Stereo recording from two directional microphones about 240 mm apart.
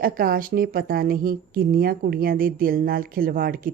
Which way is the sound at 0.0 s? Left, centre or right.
Right.